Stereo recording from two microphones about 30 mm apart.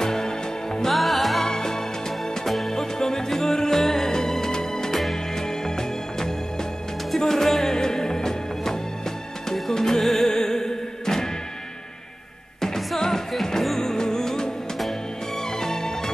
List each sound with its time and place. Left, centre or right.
0.0 s music: centre
0.9 s music: centre
1.4 s music: centre
2.4 s music: centre
2.7 s music: centre
12.6 s music: centre
15.6 s music: centre